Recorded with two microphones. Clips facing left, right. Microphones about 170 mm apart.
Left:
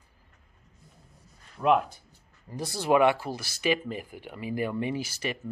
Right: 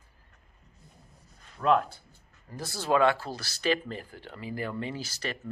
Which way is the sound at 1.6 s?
15° left (ahead or behind).